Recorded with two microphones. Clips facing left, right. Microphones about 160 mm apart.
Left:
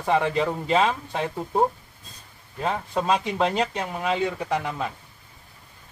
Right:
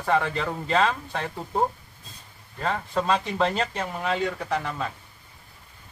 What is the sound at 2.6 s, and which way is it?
A man's voice, 15° left (ahead or behind).